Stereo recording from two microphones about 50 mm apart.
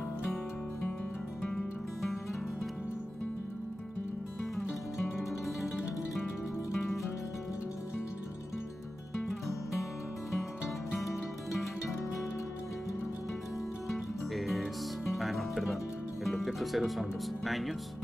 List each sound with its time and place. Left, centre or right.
1.4 s music: centre
14.3 s music: centre
16.3 s speech: centre